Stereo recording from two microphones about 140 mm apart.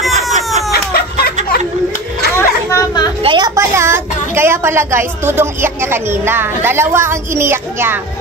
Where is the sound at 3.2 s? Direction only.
30° right (ahead or behind).